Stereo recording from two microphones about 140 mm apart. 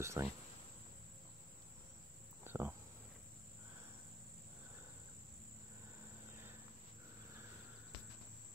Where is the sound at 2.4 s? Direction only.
15° right (ahead or behind).